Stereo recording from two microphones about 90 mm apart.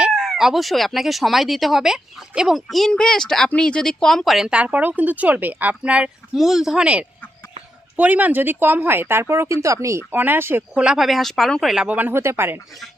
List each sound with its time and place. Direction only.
0.0 s speech: 5° right (ahead or behind); by 10.0 s 35° right (ahead or behind)
10.1 s speech: 20° right (ahead or behind)
10.8 s speech: 10° right (ahead or behind)
11.9 s speech: 20° right (ahead or behind)